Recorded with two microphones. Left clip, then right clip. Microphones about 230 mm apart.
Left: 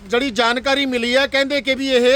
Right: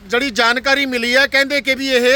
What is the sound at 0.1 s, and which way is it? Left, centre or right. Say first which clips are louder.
A man's voice: right 2 dB; centre.